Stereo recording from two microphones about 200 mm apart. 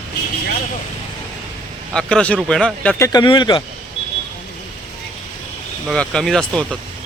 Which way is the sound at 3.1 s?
25° left (ahead or behind).